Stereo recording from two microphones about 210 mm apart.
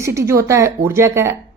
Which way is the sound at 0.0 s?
15° right (ahead or behind).